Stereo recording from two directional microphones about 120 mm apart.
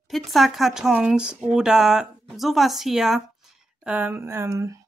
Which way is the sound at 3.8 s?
15° right (ahead or behind).